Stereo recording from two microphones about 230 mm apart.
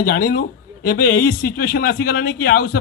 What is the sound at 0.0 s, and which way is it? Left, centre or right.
A man's voice, left.